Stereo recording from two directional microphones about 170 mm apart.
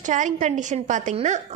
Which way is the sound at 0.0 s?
45° right (ahead or behind).